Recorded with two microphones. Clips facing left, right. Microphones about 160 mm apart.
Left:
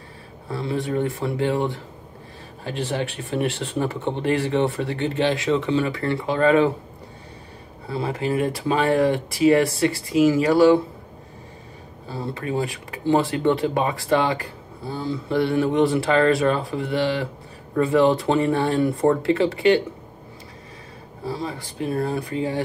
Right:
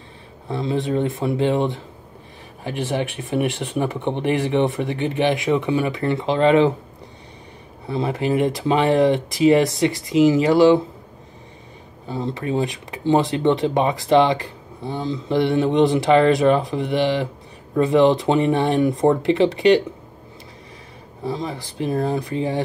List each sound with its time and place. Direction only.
0.5 s speech: 20° right (ahead or behind)
7.9 s speech: 25° right (ahead or behind)
12.1 s speech: 20° right (ahead or behind)
21.3 s speech: 20° right (ahead or behind)